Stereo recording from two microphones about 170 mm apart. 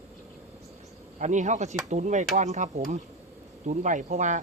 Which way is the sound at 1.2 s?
45° right (ahead or behind).